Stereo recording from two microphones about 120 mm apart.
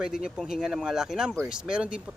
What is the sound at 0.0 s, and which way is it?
Speech, 5° right (ahead or behind).